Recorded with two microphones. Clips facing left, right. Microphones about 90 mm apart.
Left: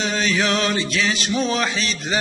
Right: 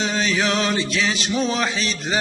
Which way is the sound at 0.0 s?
25° right (ahead or behind).